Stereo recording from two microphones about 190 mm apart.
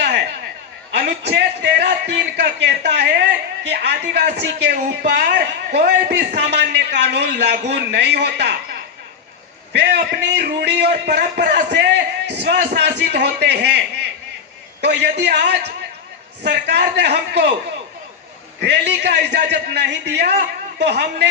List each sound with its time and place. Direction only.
0.0 s a sound: 60° right (ahead or behind)
0.9 s a man's voice: 60° right (ahead or behind)
18.6 s a man's voice: 60° right (ahead or behind)